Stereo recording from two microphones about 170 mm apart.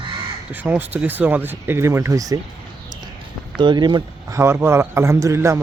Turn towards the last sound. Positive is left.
turn(degrees=-15)  # may be behind; listen again after turning